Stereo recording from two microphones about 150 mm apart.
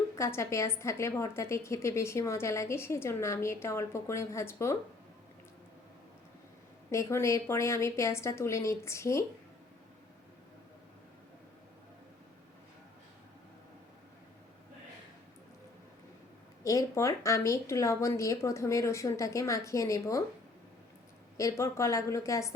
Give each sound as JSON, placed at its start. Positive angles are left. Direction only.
{"t": 0.2, "sound": "a woman's voice", "side_deg": 20}
{"t": 6.9, "sound": "a woman's voice", "side_deg": 20}
{"t": 16.6, "sound": "a woman's voice", "side_deg": 20}
{"t": 21.3, "sound": "a woman's voice", "side_deg": 20}